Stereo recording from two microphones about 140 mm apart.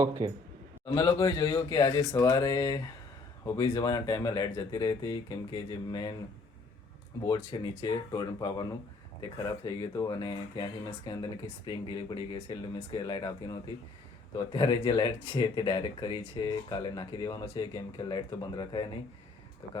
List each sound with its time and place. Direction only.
0.0 s a man's voice: 25° right (ahead or behind)
0.9 s speech: 25° left (ahead or behind)
7.3 s speech: 30° left (ahead or behind)